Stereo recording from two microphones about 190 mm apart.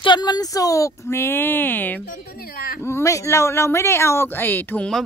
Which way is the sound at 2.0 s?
50° left (ahead or behind).